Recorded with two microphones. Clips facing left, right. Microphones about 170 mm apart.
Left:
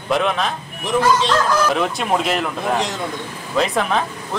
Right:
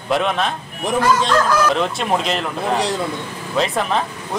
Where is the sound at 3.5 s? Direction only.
Centre (ahead or behind).